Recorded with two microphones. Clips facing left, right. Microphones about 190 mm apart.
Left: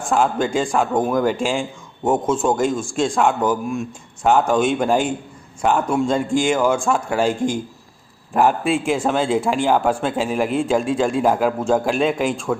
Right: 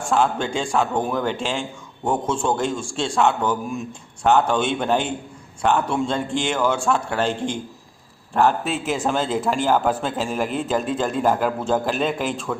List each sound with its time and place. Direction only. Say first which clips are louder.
0.1 s a man's voice: left 2 dB; 10° left (ahead or behind)
12.5 s a man's voice: left 5 dB; 15° left (ahead or behind)